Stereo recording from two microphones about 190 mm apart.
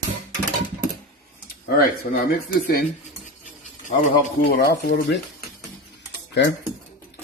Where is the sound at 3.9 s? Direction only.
40° left (ahead or behind).